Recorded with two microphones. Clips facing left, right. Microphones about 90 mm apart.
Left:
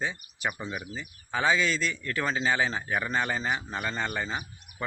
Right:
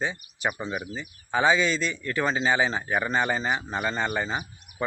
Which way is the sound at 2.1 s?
25° right (ahead or behind).